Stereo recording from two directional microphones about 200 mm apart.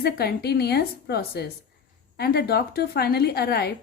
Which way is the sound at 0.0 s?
50° left (ahead or behind).